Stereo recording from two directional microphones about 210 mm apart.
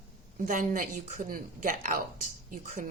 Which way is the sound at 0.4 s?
40° right (ahead or behind).